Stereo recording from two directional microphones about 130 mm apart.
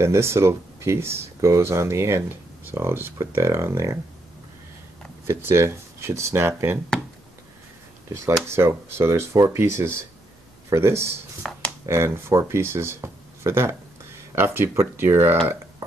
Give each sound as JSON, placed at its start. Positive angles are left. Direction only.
{"t": 0.0, "sound": "speech", "side_deg": -20}
{"t": 5.2, "sound": "speech", "side_deg": -20}
{"t": 8.5, "sound": "speech", "side_deg": -20}
{"t": 11.4, "sound": "speech", "side_deg": 5}
{"t": 11.8, "sound": "speech", "side_deg": -20}